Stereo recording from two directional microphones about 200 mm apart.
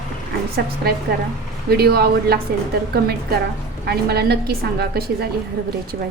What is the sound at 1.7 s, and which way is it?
A woman's voice, 50° right (ahead or behind).